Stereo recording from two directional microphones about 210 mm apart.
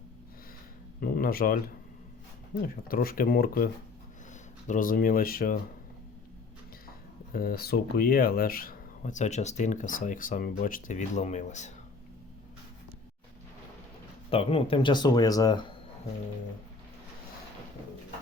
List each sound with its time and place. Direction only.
1.0 s speech: 45° left (ahead or behind)
2.8 s speech: 45° left (ahead or behind)
4.7 s speech: 40° left (ahead or behind)
7.3 s speech: 45° left (ahead or behind)
14.3 s speech: 25° left (ahead or behind)